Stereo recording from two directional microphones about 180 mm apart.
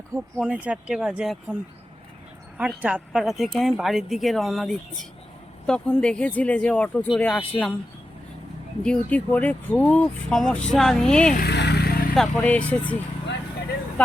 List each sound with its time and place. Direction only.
0.3 s speech: 5° right (ahead or behind)
2.6 s speech: 5° right (ahead or behind)
8.8 s speech: 5° left (ahead or behind)
11.3 s vehicle: 65° left (ahead or behind)
12.1 s speech: 5° left (ahead or behind)